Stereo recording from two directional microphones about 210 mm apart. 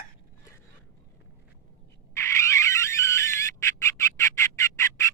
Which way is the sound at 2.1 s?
15° left (ahead or behind).